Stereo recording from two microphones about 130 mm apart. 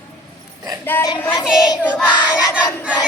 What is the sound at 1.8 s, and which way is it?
Child singing, 10° left (ahead or behind).